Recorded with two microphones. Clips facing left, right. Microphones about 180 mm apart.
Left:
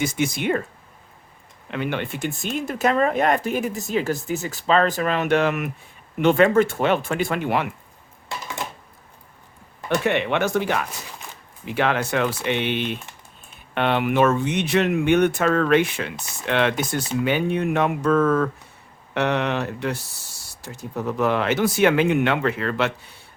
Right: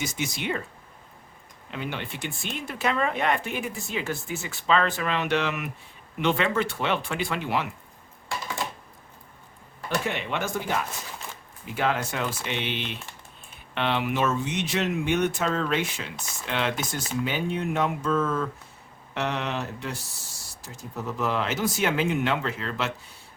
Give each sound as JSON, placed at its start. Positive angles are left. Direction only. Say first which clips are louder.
{"t": 0.0, "sound": "speech", "louder": "left 8 dB", "side_deg": 55}
{"t": 1.7, "sound": "speech", "louder": "left 7 dB", "side_deg": 60}
{"t": 10.0, "sound": "speech", "louder": "left 10 dB", "side_deg": 65}